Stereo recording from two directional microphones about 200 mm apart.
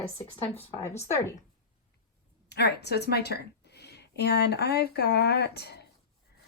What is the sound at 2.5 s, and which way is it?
A woman's voice, 55° left (ahead or behind).